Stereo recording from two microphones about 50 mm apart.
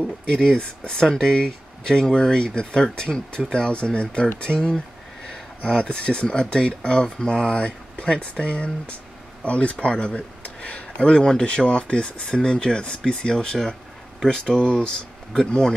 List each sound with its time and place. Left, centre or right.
0.3 s speech: centre